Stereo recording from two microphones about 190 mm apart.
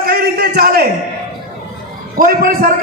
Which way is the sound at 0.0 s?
55° right (ahead or behind).